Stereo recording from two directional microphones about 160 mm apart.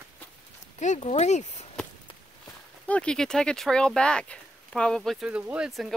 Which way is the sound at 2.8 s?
5° left (ahead or behind).